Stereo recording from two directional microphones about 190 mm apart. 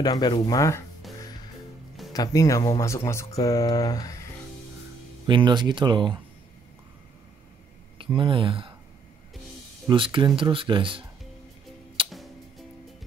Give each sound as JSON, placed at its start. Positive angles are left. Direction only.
{"t": 0.0, "sound": "speech", "side_deg": 20}
{"t": 2.1, "sound": "speech", "side_deg": 15}
{"t": 5.2, "sound": "speech", "side_deg": -25}
{"t": 8.0, "sound": "speech", "side_deg": -25}
{"t": 9.8, "sound": "speech", "side_deg": -25}
{"t": 12.1, "sound": "music", "side_deg": 0}